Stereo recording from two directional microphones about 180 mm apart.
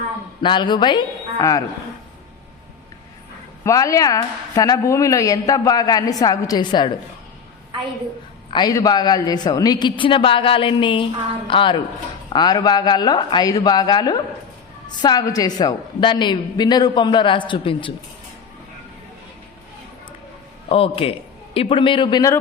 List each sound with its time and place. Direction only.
0.4 s a woman's voice: 25° left (ahead or behind)
3.6 s a woman's voice: 15° left (ahead or behind)
8.4 s a woman's voice: 25° left (ahead or behind)
20.7 s a man's voice: 30° left (ahead or behind)